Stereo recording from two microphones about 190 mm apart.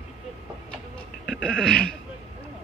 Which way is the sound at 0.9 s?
5° left (ahead or behind).